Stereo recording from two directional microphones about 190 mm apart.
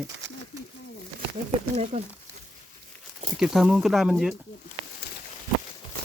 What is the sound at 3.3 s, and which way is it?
Speech, centre (ahead or behind).